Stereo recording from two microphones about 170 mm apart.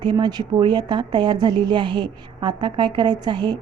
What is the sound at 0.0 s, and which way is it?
Speech, 25° right (ahead or behind).